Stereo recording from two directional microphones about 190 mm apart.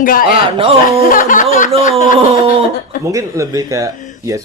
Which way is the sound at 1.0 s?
45° left (ahead or behind).